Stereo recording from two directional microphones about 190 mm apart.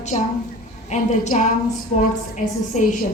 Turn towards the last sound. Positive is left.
turn(degrees=40)  # may be behind; listen again after turning